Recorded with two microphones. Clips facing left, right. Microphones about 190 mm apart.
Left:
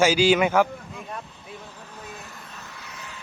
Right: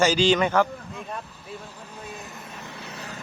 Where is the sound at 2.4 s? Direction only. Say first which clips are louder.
Right 4 dB; 25° right (ahead or behind).